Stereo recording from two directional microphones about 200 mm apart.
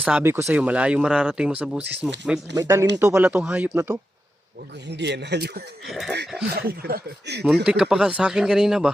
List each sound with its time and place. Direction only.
0.0 s speech: 10° right (ahead or behind)
4.9 s speech: 60° right (ahead or behind)
5.8 s speech: centre (ahead or behind)
6.6 s speech: 50° right (ahead or behind)
7.4 s speech: centre (ahead or behind)